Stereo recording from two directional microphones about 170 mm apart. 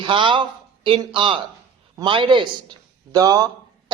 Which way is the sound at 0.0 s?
30° right (ahead or behind).